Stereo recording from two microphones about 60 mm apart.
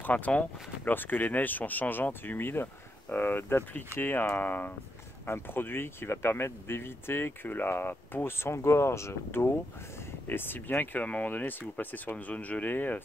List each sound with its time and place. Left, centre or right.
0.0 s speech: left
10.2 s speech: left